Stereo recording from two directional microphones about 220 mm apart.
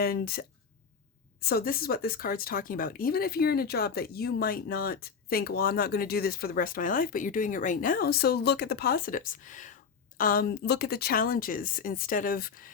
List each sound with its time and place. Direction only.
0.0 s speech: 45° left (ahead or behind)